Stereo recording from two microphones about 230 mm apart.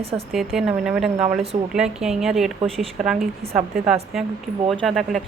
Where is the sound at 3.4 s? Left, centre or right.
Right.